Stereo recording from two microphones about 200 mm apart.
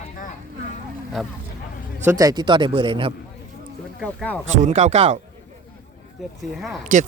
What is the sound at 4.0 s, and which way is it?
Speech, 5° left (ahead or behind).